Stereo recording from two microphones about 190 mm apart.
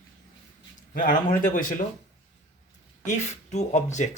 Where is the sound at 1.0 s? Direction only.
45° left (ahead or behind).